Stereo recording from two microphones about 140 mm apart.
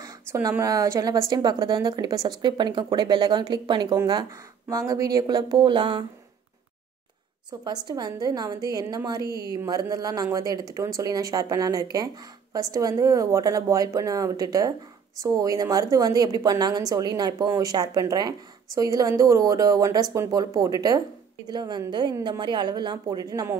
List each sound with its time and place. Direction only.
0.0 s a woman's voice: 20° right (ahead or behind)
7.6 s a woman's voice: 30° right (ahead or behind)